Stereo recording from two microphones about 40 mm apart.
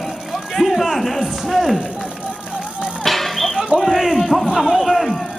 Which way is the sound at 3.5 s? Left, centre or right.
Centre.